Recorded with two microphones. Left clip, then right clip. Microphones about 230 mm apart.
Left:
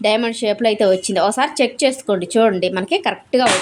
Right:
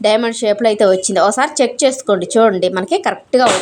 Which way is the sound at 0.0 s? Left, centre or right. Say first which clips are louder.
Right 3 dB; centre.